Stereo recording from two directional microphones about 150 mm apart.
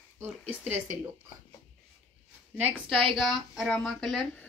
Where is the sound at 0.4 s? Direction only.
5° left (ahead or behind).